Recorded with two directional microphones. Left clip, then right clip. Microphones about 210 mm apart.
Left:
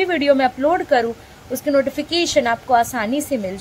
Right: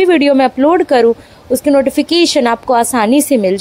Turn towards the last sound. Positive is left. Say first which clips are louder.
# right 11 dB
turn(degrees=-40)  # may be behind; listen again after turning